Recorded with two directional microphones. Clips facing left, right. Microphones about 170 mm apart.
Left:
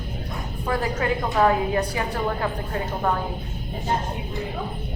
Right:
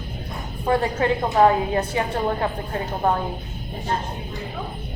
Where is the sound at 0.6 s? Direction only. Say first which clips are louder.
Right 4 dB; 25° right (ahead or behind).